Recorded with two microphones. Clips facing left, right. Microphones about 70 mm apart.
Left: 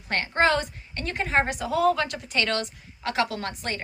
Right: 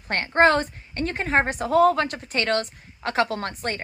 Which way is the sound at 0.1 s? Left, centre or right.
Right.